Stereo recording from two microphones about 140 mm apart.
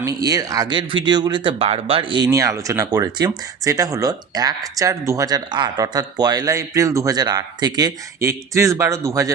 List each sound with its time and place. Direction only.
0.0 s speech: 25° right (ahead or behind)